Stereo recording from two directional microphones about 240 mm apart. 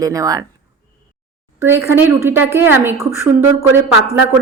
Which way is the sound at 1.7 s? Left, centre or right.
Centre.